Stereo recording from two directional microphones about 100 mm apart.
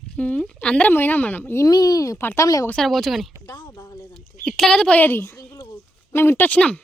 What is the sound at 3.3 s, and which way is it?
Speech, 35° left (ahead or behind).